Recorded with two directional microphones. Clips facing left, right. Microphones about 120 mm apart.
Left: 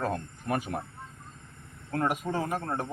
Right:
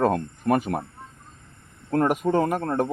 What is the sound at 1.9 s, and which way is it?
Speech, 60° right (ahead or behind).